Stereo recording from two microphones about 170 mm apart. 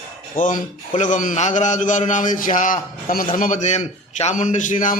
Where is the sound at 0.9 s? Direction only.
50° left (ahead or behind).